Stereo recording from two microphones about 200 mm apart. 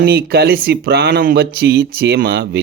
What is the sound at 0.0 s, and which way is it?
Speech, 50° right (ahead or behind).